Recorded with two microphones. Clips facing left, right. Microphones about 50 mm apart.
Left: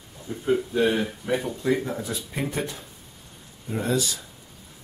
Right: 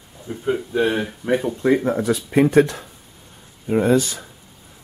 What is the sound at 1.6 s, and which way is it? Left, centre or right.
Speech, right.